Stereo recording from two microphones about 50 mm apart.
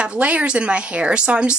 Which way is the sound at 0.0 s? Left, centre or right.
Right.